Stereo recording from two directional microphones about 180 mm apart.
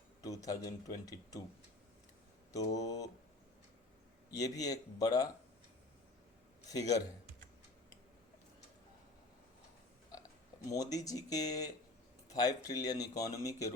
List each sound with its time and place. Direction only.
0.2 s speech: 20° left (ahead or behind)
2.5 s speech: 20° left (ahead or behind)
4.3 s speech: 20° left (ahead or behind)
6.7 s speech: 20° left (ahead or behind)
10.7 s speech: 20° left (ahead or behind)